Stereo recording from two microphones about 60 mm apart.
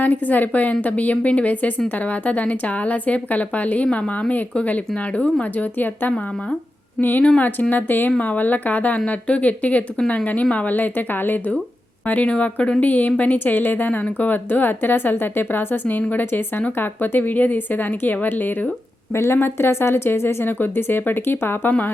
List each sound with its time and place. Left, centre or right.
0.0 s a woman's voice: left
7.3 s speech: left
19.1 s a woman's voice: left